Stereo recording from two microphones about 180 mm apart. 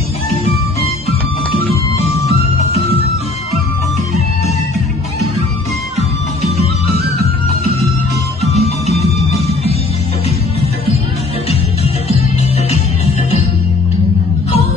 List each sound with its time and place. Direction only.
2.0 s music: 35° left (ahead or behind)
6.5 s music: 35° left (ahead or behind)
8.5 s music: 35° left (ahead or behind)
9.4 s music: 35° right (ahead or behind)
12.6 s music: 35° left (ahead or behind)